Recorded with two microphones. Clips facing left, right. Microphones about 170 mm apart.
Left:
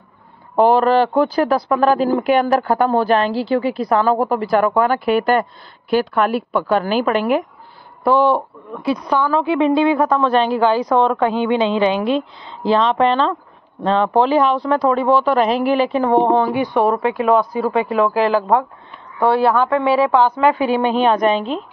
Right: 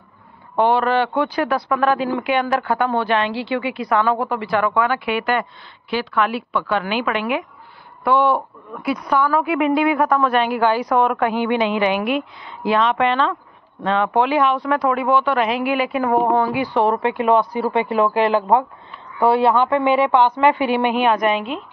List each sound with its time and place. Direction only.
0.6 s speech: 40° left (ahead or behind)
8.8 s a woman's voice: 20° left (ahead or behind)
16.0 s a woman's voice: 20° left (ahead or behind)
17.1 s speech: 15° right (ahead or behind)
18.0 s speech: centre (ahead or behind)
20.5 s speech: 15° right (ahead or behind)
21.3 s speech: 35° left (ahead or behind)